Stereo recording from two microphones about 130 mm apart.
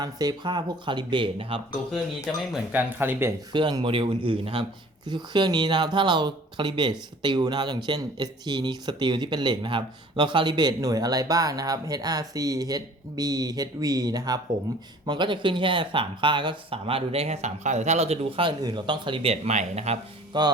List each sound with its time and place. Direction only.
0.0 s speech: 30° right (ahead or behind)
2.7 s speech: 15° right (ahead or behind)
3.5 s speech: 35° right (ahead or behind)
18.6 s speech: 35° right (ahead or behind); by 20.0 s 60° right (ahead or behind)
20.3 s speech: 35° right (ahead or behind)